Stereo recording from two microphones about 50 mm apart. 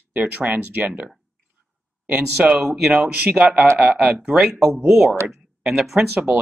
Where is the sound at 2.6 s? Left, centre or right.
Centre.